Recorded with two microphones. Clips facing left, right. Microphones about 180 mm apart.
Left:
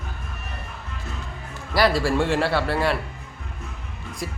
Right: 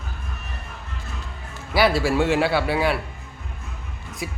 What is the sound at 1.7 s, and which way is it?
A man's voice, centre (ahead or behind).